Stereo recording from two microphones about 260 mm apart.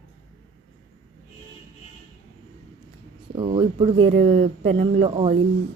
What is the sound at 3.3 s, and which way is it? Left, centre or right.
Speech, centre.